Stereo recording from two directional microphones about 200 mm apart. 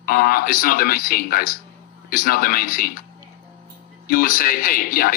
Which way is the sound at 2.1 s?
45° left (ahead or behind).